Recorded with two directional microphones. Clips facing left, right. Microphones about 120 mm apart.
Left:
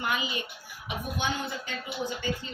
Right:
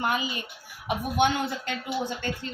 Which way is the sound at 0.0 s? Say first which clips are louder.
Right 3 dB; 40° right (ahead or behind).